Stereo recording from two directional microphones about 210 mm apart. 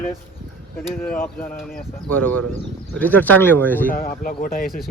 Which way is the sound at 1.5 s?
40° left (ahead or behind).